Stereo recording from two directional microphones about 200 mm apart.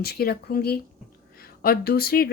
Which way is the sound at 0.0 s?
50° left (ahead or behind).